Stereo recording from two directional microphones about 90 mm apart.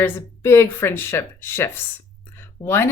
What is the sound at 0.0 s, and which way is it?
Speech, 25° left (ahead or behind).